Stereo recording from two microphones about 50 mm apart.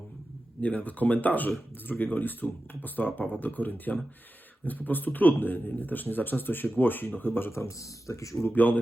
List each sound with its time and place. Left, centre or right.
0.6 s a man's voice: left
7.5 s speech: left
8.5 s a man's voice: left